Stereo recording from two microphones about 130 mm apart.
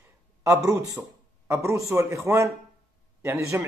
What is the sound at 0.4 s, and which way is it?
A man's voice, 25° right (ahead or behind).